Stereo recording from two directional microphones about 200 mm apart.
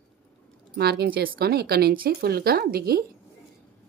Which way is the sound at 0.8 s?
55° right (ahead or behind).